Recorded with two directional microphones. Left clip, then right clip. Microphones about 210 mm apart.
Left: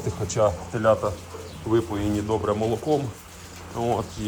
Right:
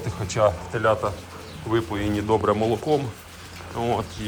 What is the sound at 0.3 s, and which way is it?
Speech, 20° left (ahead or behind).